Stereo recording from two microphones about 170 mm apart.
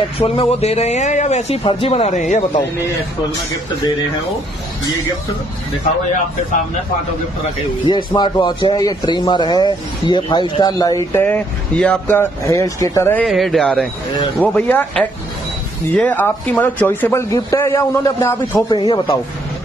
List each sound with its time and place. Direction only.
0.2 s speech: 35° left (ahead or behind)
7.8 s speech: 25° left (ahead or behind)
11.2 s a man's voice: 10° left (ahead or behind)
13.2 s a man's voice: centre (ahead or behind); by 19.1 s 25° left (ahead or behind)